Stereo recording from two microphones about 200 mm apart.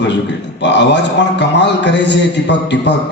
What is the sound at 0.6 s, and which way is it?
A man's voice, 60° left (ahead or behind).